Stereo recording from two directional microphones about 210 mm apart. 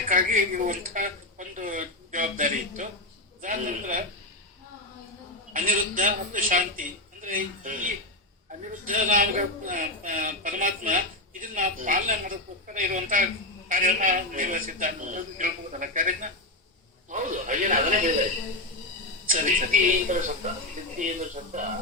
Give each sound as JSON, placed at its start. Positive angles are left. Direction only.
{"t": 0.1, "sound": "a man's voice", "side_deg": -40}
{"t": 5.5, "sound": "a man's voice", "side_deg": -40}
{"t": 19.3, "sound": "a man's voice", "side_deg": -40}